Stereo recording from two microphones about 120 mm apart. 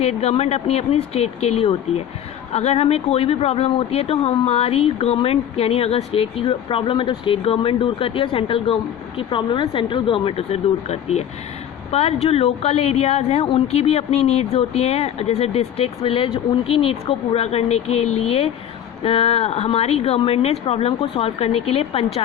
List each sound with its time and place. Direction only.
0.0 s speech: 60° left (ahead or behind)